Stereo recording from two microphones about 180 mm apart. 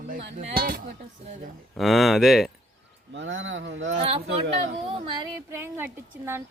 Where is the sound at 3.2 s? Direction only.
90° right.